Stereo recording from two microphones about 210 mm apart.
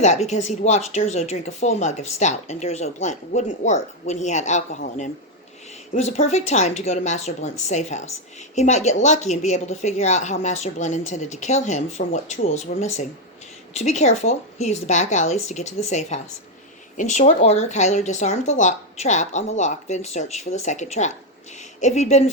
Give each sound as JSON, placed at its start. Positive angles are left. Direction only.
{"t": 0.0, "sound": "speech", "side_deg": 30}